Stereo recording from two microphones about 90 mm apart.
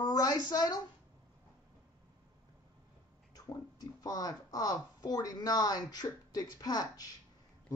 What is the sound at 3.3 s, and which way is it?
Speech, 45° left (ahead or behind).